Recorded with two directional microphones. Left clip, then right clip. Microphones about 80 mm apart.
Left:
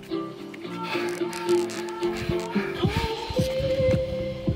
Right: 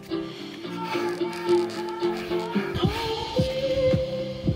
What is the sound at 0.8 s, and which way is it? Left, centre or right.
Music, centre.